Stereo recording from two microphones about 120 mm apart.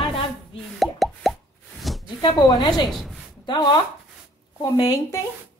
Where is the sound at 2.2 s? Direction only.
35° left (ahead or behind).